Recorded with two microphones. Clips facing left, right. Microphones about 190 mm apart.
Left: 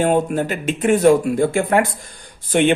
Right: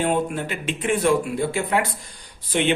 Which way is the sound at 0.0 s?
45° left (ahead or behind).